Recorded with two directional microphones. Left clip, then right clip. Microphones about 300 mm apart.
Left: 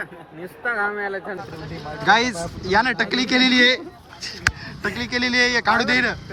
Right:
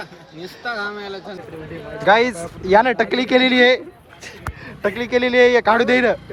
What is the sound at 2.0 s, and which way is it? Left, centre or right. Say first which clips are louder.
Speech: right 3 dB; centre.